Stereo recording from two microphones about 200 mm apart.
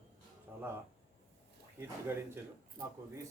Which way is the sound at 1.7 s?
10° right (ahead or behind).